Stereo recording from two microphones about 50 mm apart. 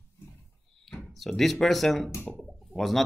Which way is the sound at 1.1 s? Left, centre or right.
Centre.